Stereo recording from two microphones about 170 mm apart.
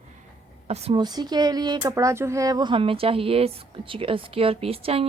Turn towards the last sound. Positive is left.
turn(degrees=-35)  # may be behind; listen again after turning